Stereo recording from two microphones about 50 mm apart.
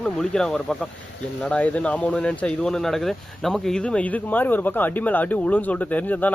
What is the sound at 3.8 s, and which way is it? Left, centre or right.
Speech, left.